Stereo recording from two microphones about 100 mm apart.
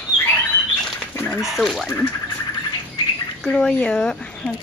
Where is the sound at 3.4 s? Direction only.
10° left (ahead or behind).